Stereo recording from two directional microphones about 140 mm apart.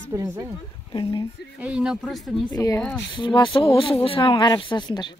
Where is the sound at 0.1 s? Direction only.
25° right (ahead or behind).